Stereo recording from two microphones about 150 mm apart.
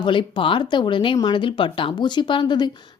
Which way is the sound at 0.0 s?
35° left (ahead or behind).